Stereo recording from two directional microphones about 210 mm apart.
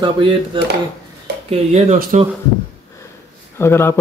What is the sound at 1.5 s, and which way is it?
Speech, 35° right (ahead or behind).